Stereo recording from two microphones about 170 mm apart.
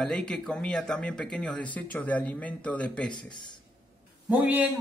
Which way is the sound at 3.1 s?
25° left (ahead or behind).